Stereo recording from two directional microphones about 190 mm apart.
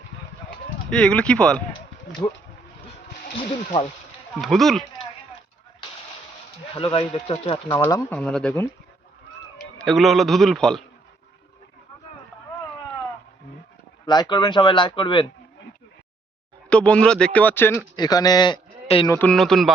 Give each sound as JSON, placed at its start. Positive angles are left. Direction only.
{"t": 0.9, "sound": "speech", "side_deg": 5}
{"t": 4.4, "sound": "speech", "side_deg": 0}
{"t": 6.7, "sound": "speech", "side_deg": 25}
{"t": 7.8, "sound": "a man's voice", "side_deg": 15}
{"t": 14.1, "sound": "speech", "side_deg": 20}
{"t": 16.6, "sound": "a man's voice", "side_deg": 5}
{"t": 19.1, "sound": "speech", "side_deg": 5}